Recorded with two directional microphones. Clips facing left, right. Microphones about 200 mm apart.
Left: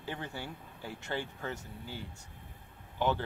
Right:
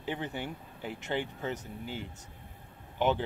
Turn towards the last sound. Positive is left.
turn(degrees=-20)  # may be behind; listen again after turning